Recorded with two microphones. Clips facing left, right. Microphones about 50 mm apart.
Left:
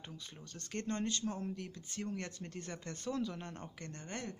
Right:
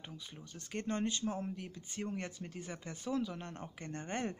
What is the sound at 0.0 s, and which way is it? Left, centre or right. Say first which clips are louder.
Speech: right 1 dB; centre.